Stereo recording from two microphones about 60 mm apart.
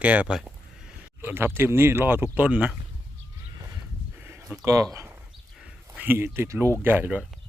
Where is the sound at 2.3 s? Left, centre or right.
Right.